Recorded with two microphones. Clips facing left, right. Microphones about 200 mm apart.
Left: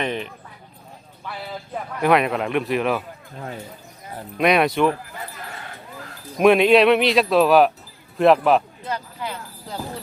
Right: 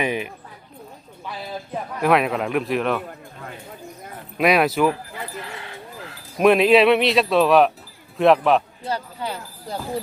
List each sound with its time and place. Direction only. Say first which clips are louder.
0.0 s speech: right 2 dB; 10° right (ahead or behind)
2.0 s speech: left 1 dB; centre (ahead or behind)
4.4 s speech: even; 5° right (ahead or behind)
5.4 s sheep: right 2 dB; 45° left (ahead or behind)
6.4 s speech: even; centre (ahead or behind)
8.9 s jingle bell: right 2 dB; 35° right (ahead or behind)